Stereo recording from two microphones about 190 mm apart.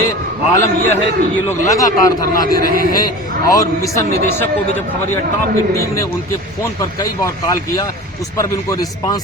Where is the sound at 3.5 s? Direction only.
15° left (ahead or behind).